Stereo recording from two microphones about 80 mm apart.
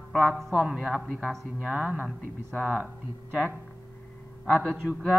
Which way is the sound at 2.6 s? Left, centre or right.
Centre.